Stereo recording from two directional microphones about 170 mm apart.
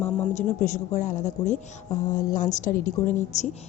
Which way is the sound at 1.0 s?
45° left (ahead or behind).